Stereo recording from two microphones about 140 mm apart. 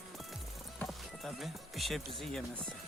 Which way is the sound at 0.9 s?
Centre (ahead or behind).